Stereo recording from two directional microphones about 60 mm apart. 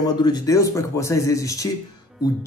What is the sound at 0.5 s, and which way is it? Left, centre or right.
Speech, left.